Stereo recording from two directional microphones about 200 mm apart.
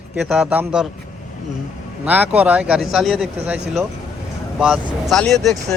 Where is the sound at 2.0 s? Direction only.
10° right (ahead or behind).